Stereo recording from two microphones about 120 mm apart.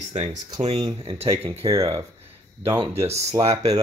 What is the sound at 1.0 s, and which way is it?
Speech, 55° right (ahead or behind).